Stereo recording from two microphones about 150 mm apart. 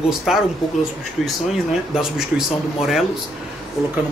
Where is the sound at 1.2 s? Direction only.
Centre (ahead or behind).